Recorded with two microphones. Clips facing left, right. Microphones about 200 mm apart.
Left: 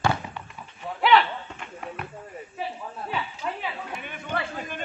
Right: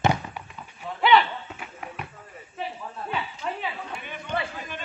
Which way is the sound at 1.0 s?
Centre (ahead or behind).